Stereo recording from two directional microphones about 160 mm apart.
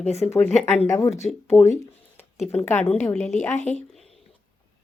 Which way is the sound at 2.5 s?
10° left (ahead or behind).